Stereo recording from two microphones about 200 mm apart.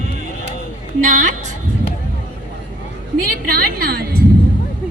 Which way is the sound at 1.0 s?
40° right (ahead or behind).